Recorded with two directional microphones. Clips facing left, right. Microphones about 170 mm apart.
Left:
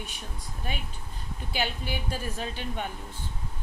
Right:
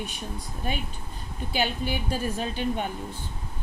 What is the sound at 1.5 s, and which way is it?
A woman's voice, 15° right (ahead or behind).